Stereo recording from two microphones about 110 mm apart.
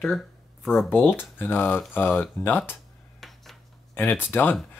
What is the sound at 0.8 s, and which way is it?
Speech, 15° left (ahead or behind).